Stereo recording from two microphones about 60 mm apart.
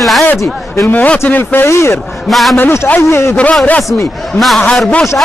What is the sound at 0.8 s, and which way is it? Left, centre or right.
Speech, left.